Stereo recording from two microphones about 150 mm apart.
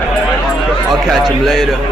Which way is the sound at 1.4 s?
Centre (ahead or behind).